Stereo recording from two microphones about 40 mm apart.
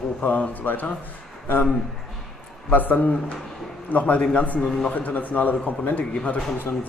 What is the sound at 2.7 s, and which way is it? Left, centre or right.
A man's voice, left.